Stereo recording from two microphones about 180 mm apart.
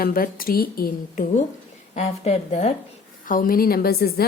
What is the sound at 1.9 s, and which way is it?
Speech, 35° left (ahead or behind).